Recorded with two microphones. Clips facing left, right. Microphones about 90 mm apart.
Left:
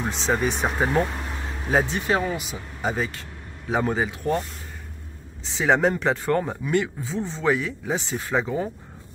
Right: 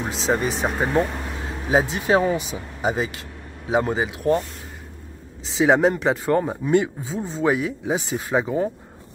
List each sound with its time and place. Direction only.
0.1 s speech: centre (ahead or behind)
2.0 s speech: 25° right (ahead or behind)
2.8 s speech: 10° right (ahead or behind)
5.4 s speech: 5° right (ahead or behind)
6.6 s speech: 20° right (ahead or behind)